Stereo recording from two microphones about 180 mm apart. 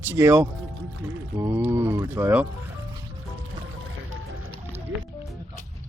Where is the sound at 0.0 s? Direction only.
15° right (ahead or behind).